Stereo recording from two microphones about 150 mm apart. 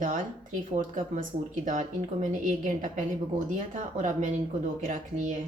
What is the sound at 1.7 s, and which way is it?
A woman's voice, 55° right (ahead or behind).